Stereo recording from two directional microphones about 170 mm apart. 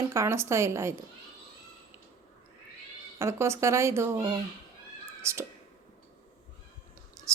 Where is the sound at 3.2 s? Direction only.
15° right (ahead or behind).